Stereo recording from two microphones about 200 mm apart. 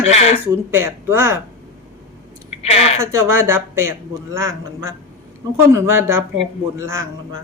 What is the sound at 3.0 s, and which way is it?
Speech, 15° right (ahead or behind).